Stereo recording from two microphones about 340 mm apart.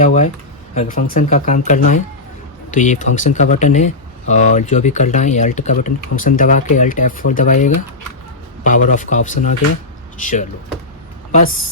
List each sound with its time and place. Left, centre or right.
0.0 s speech: left